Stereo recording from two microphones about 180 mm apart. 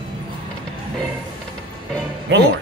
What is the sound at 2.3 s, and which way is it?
Speech, 75° right (ahead or behind).